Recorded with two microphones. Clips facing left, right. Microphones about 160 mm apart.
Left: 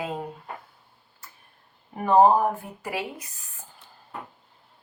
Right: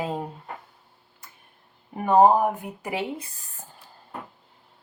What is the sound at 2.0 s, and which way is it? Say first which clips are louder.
Speech: even; 15° right (ahead or behind).